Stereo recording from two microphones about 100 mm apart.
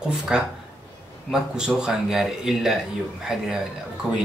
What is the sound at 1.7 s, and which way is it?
Speech, 5° right (ahead or behind).